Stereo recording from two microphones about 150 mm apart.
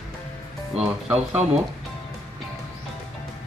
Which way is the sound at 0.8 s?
5° right (ahead or behind).